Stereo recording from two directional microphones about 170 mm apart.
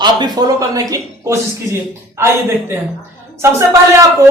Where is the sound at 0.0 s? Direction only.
25° right (ahead or behind).